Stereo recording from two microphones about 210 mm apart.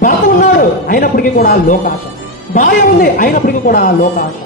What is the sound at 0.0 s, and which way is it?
A man's voice, 40° left (ahead or behind).